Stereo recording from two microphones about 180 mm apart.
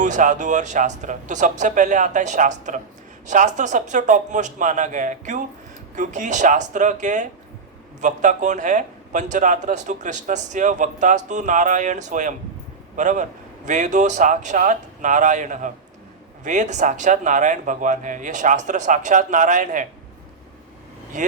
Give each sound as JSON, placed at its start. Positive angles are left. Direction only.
{"t": 0.0, "sound": "a man's voice", "side_deg": -45}
{"t": 21.1, "sound": "a man's voice", "side_deg": -45}